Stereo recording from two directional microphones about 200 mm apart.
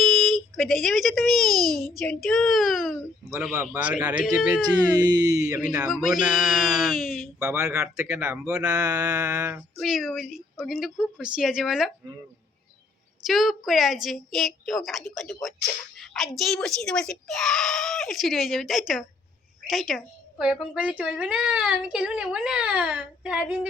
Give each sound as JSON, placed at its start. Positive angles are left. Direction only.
{"t": 0.0, "sound": "a child's voice", "side_deg": 0}
{"t": 4.9, "sound": "speech", "side_deg": -20}
{"t": 5.8, "sound": "speech", "side_deg": 0}
{"t": 7.8, "sound": "speech", "side_deg": -15}
{"t": 9.7, "sound": "speech", "side_deg": 0}
{"t": 13.2, "sound": "a woman's voice", "side_deg": 0}